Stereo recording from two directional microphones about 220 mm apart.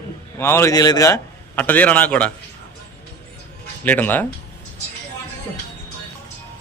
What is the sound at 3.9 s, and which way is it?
Speech, 10° left (ahead or behind).